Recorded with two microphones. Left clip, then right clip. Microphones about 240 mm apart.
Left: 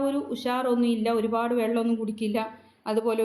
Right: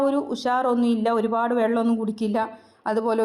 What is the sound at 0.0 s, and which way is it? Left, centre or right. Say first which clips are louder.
A woman's voice: right 5 dB; right.